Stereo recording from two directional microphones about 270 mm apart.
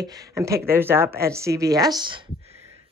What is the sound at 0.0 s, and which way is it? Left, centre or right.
Speech, centre.